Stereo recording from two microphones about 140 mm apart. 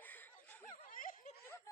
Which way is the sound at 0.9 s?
70° left (ahead or behind).